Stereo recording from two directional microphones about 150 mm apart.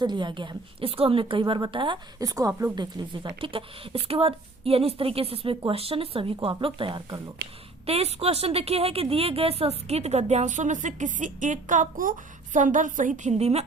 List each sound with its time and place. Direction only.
0.0 s speech: 30° right (ahead or behind)
3.4 s a woman's voice: 35° right (ahead or behind)